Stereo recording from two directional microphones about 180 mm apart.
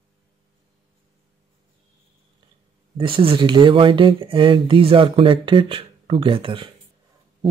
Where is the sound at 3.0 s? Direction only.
30° right (ahead or behind).